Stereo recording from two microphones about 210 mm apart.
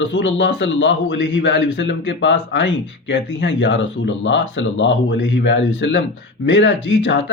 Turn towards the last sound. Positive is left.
turn(degrees=60)  # may be behind; listen again after turning